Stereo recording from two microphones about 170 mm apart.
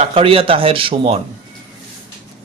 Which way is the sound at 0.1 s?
35° right (ahead or behind).